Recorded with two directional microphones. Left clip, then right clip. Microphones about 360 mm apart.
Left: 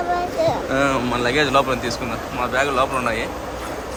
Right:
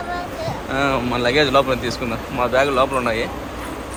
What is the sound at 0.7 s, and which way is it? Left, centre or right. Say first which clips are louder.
Speech: even; centre.